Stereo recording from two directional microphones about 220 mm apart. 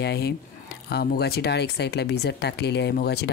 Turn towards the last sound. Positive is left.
turn(degrees=45)  # may be behind; listen again after turning